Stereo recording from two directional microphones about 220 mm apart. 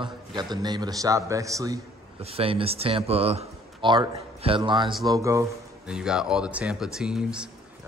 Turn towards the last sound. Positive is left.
turn(degrees=-5)  # may be behind; listen again after turning